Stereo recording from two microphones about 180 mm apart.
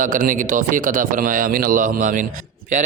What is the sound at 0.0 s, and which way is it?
A man's voice, 45° right (ahead or behind).